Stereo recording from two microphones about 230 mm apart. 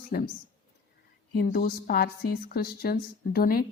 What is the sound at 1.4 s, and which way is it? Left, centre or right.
Speech, left.